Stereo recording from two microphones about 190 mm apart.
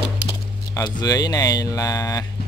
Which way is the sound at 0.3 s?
25° left (ahead or behind).